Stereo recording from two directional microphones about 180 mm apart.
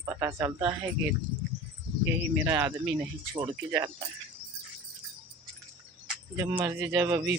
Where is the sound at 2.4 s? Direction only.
10° right (ahead or behind).